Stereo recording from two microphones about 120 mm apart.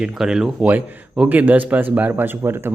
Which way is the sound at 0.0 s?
5° right (ahead or behind).